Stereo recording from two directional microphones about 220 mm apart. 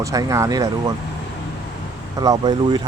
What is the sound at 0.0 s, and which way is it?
Speech, 15° right (ahead or behind).